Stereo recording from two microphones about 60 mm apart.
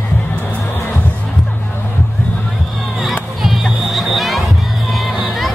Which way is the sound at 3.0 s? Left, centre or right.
Centre.